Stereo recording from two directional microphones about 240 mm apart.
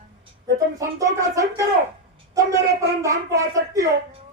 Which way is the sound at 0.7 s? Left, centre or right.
Centre.